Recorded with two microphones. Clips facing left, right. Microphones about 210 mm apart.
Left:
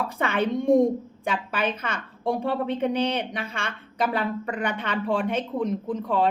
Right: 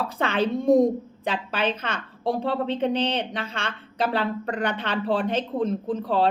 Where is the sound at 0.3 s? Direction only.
30° right (ahead or behind).